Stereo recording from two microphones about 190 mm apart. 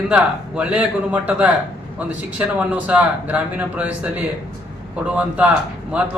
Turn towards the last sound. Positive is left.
turn(degrees=-5)  # may be behind; listen again after turning